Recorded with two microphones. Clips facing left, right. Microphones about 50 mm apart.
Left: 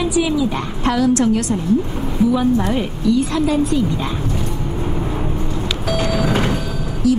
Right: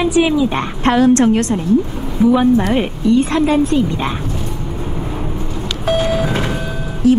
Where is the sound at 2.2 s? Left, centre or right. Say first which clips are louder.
Right 4 dB; right.